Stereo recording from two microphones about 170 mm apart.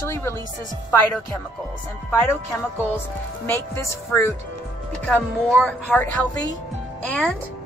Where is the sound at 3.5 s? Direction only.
15° left (ahead or behind).